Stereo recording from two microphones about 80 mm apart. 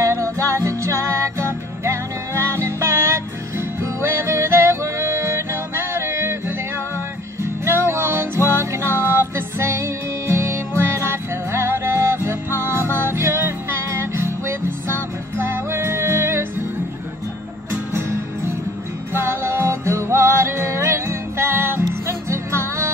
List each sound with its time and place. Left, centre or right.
0.0 s music: right
7.6 s music: right
19.1 s music: right